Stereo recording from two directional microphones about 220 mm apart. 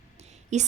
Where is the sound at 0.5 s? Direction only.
30° right (ahead or behind).